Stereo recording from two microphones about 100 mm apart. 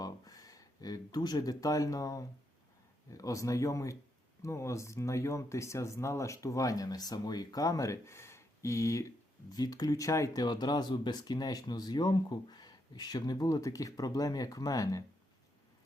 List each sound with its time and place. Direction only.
0.0 s speech: 40° left (ahead or behind)
10.4 s speech: 45° left (ahead or behind)